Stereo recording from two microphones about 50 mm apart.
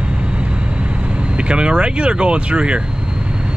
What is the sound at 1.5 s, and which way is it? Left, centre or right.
Speech, right.